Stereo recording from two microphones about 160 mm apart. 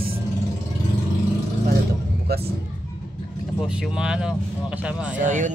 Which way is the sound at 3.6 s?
5° right (ahead or behind).